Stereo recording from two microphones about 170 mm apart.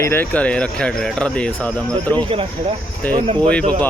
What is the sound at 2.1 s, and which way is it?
Speech, 35° right (ahead or behind).